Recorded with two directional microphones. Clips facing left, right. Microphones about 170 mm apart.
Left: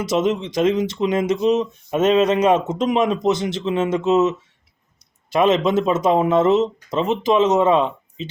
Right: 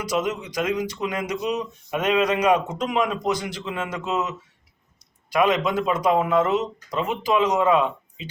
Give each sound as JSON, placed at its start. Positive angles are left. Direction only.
{"t": 0.0, "sound": "speech", "side_deg": 25}